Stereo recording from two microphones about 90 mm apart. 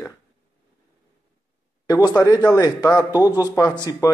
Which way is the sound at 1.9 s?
40° left (ahead or behind).